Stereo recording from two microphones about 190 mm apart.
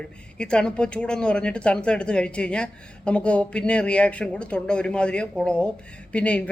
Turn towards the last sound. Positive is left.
turn(degrees=5)  # may be behind; listen again after turning